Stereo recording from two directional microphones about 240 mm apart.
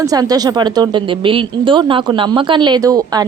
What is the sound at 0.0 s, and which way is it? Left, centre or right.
Speech, centre.